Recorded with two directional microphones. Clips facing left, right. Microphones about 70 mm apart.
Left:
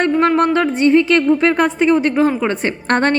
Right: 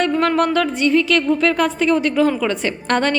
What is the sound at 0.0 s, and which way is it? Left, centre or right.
A woman's voice, left.